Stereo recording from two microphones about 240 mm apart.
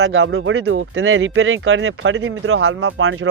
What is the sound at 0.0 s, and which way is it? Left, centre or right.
Speech, right.